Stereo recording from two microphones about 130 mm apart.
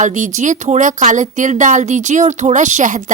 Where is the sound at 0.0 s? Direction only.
75° right (ahead or behind).